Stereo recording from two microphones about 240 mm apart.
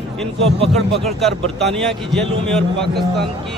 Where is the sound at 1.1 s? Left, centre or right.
Centre.